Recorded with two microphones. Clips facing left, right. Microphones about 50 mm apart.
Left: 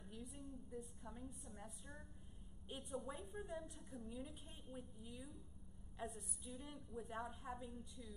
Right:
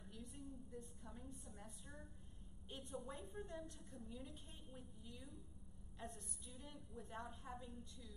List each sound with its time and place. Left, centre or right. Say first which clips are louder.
0.0 s a woman's voice: left 1 dB; centre